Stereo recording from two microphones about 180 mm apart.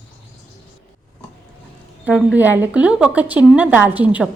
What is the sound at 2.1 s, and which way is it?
A woman's voice, 5° right (ahead or behind).